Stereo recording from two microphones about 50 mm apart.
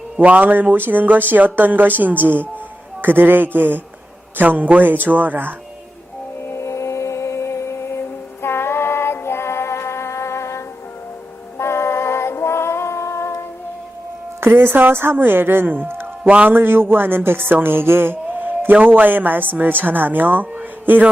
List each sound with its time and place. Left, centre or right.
0.2 s speech: right
6.5 s music: left
11.5 s music: left
14.4 s speech: right
16.2 s speech: right
16.5 s a man's voice: right